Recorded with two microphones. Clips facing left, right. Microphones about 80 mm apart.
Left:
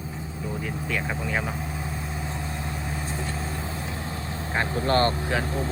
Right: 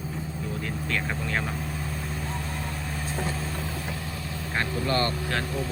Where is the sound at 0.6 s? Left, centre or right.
Centre.